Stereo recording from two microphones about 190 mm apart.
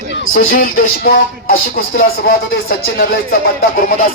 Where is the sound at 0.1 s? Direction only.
75° left (ahead or behind).